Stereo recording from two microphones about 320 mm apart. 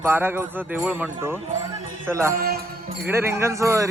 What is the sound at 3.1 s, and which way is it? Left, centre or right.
Speech, centre.